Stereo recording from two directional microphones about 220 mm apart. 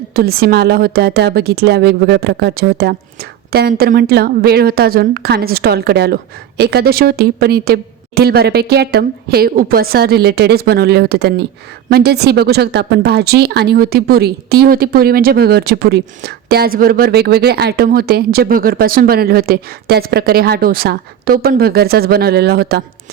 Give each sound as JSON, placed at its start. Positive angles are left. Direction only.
{"t": 0.1, "sound": "a woman's voice", "side_deg": -45}